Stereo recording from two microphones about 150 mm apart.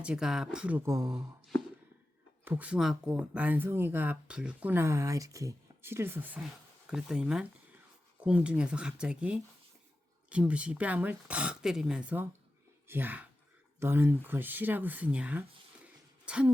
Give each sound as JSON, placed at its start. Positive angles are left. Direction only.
{"t": 0.0, "sound": "speech", "side_deg": -5}
{"t": 0.9, "sound": "speech", "side_deg": -20}
{"t": 2.4, "sound": "speech", "side_deg": -10}